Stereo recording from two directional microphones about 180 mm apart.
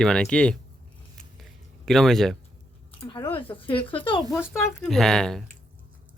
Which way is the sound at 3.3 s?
30° left (ahead or behind).